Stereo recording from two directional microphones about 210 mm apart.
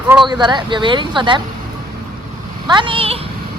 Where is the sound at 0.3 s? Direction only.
20° right (ahead or behind).